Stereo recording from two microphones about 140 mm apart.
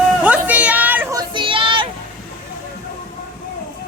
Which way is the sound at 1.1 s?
35° right (ahead or behind).